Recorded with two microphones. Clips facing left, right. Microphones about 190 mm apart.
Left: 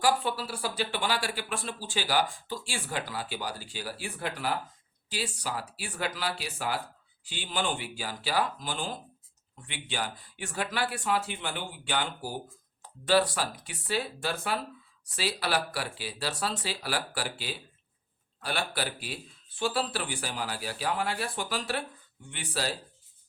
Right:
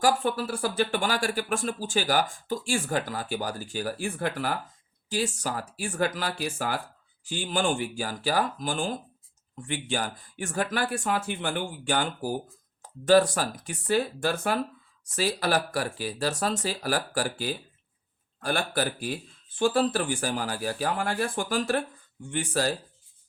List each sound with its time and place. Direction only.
0.0 s speech: 50° right (ahead or behind)